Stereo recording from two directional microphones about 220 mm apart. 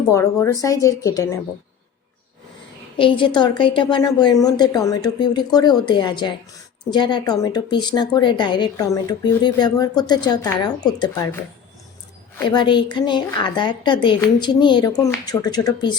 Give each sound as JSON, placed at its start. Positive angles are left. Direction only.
{"t": 0.1, "sound": "speech", "side_deg": 15}
{"t": 3.0, "sound": "speech", "side_deg": 20}
{"t": 12.5, "sound": "speech", "side_deg": 20}